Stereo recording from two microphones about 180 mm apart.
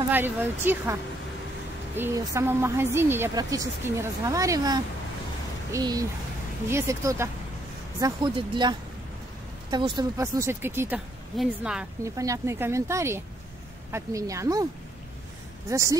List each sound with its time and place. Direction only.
0.1 s a woman's voice: 10° right (ahead or behind)
2.0 s a woman's voice: 15° right (ahead or behind)
8.0 s speech: 25° right (ahead or behind)
10.2 s a woman's voice: 15° right (ahead or behind)
12.0 s a woman's voice: 15° right (ahead or behind)
15.7 s a woman's voice: 15° right (ahead or behind)